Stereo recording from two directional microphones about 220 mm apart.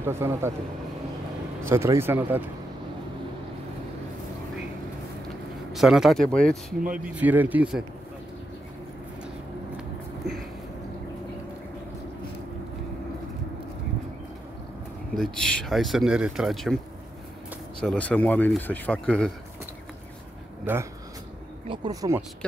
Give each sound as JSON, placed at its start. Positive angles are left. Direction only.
{"t": 0.0, "sound": "speech", "side_deg": -10}
{"t": 1.6, "sound": "speech", "side_deg": -10}
{"t": 5.7, "sound": "speech", "side_deg": 0}
{"t": 7.2, "sound": "speech", "side_deg": -5}
{"t": 9.8, "sound": "a sound", "side_deg": 0}
{"t": 15.1, "sound": "speech", "side_deg": 5}
{"t": 17.7, "sound": "speech", "side_deg": 5}
{"t": 20.7, "sound": "speech", "side_deg": -10}
{"t": 22.4, "sound": "speech", "side_deg": 5}